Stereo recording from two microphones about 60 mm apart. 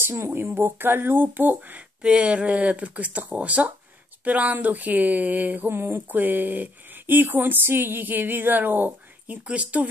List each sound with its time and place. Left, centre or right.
0.3 s speech: right
2.0 s speech: centre
5.7 s speech: right
9.5 s speech: right